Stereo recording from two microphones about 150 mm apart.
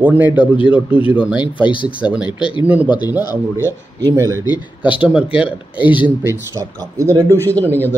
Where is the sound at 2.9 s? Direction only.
30° left (ahead or behind).